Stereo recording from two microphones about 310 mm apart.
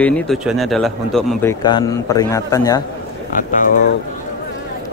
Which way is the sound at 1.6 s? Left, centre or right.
Centre.